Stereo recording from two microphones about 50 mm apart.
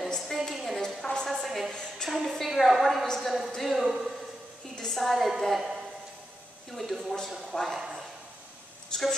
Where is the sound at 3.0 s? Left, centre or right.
Centre.